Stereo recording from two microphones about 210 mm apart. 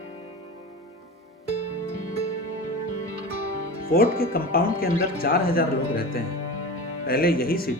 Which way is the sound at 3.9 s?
45° left (ahead or behind).